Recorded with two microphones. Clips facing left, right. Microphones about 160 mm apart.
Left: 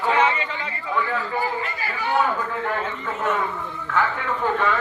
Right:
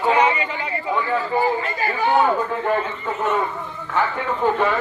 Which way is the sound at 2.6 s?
20° right (ahead or behind).